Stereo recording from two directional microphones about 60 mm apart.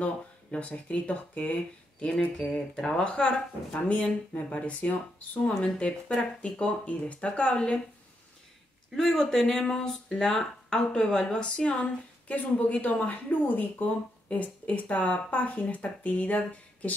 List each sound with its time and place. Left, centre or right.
0.0 s speech: left
8.9 s speech: centre; by 16.9 s left